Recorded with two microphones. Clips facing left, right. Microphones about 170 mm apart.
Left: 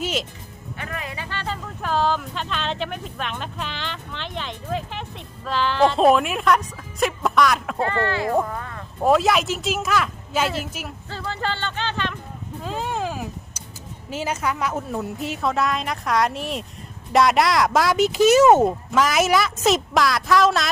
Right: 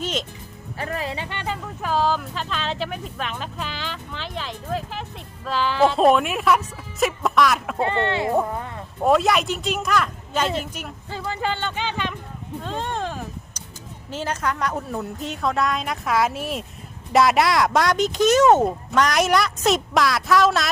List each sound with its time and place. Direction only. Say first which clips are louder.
0.0 s music: left 1 dB; 5° left (ahead or behind)
0.8 s speech: right 5 dB; 30° right (ahead or behind)
1.8 s speech: even; 5° right (ahead or behind)
7.8 s speech: right 2 dB; 20° right (ahead or behind)
9.0 s speech: even; centre (ahead or behind)
11.1 s speech: right 2 dB; 10° right (ahead or behind)
12.6 s speech: left 1 dB; 5° left (ahead or behind)